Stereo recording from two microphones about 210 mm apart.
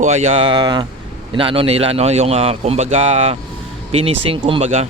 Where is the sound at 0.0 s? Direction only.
30° right (ahead or behind).